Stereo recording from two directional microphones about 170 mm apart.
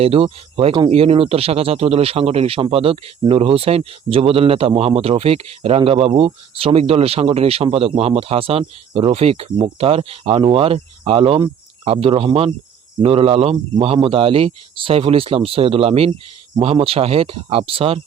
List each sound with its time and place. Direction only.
0.0 s speech: 35° right (ahead or behind)